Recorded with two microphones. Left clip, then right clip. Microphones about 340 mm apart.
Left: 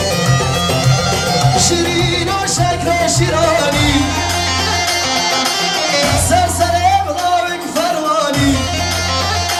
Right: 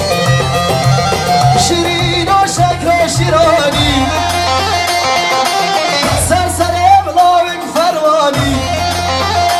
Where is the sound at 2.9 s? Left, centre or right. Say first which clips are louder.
Right 3 dB; centre.